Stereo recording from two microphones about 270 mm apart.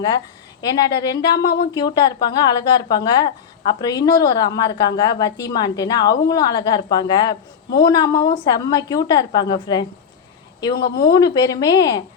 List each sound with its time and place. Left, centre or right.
0.6 s a woman's voice: centre
11.0 s a woman's voice: centre